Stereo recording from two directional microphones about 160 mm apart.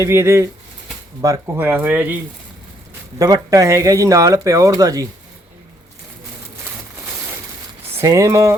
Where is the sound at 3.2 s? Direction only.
20° right (ahead or behind).